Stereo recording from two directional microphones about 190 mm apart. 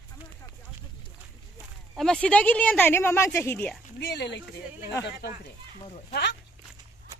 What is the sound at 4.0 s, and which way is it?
Speech, 60° left (ahead or behind).